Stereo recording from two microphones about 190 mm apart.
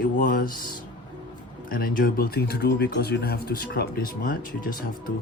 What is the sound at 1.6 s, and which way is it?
Speech, 50° left (ahead or behind).